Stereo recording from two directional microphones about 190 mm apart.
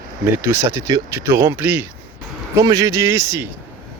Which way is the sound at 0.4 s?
15° right (ahead or behind).